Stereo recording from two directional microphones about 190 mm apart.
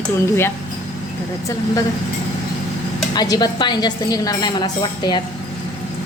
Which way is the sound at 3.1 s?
20° left (ahead or behind).